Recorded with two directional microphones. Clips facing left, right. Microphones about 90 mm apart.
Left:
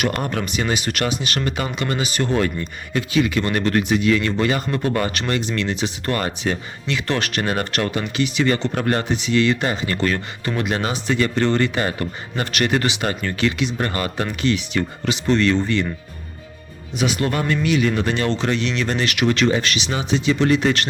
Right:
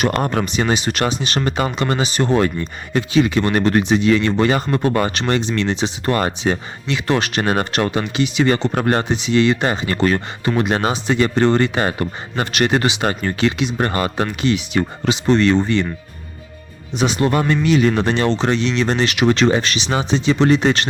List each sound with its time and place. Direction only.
0.0 s speech: 35° right (ahead or behind)
8.7 s speech: 30° right (ahead or behind)
13.7 s speech: 30° right (ahead or behind)
14.4 s speech: 20° right (ahead or behind)
17.0 s speech: 30° right (ahead or behind)